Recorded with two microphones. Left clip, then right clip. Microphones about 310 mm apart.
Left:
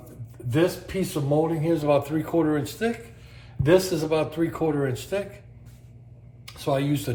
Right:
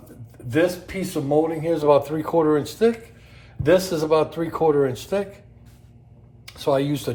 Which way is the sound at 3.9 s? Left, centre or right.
Centre.